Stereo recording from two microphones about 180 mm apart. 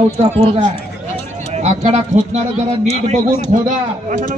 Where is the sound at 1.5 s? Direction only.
35° right (ahead or behind).